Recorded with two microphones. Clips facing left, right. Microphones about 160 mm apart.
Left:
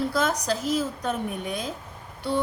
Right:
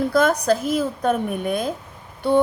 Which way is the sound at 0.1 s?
55° right (ahead or behind).